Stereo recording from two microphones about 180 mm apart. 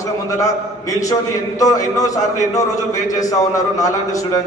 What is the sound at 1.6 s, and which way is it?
Speech, 20° left (ahead or behind).